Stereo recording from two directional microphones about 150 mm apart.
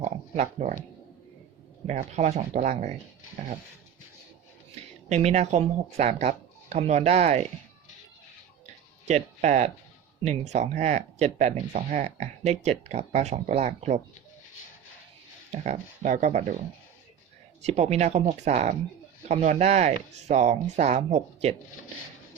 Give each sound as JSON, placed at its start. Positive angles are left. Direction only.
{"t": 0.0, "sound": "speech", "side_deg": -50}
{"t": 1.9, "sound": "speech", "side_deg": -50}
{"t": 4.7, "sound": "speech", "side_deg": -45}
{"t": 9.0, "sound": "speech", "side_deg": -50}
{"t": 15.6, "sound": "speech", "side_deg": -55}
{"t": 17.6, "sound": "speech", "side_deg": -50}